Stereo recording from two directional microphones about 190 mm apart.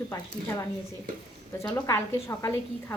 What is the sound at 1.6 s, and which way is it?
Speech, 15° left (ahead or behind).